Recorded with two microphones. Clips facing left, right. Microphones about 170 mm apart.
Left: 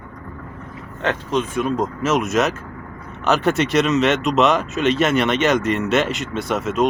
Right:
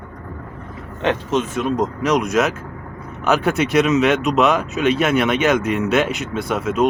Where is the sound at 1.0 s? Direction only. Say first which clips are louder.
Right 2 dB; 20° right (ahead or behind).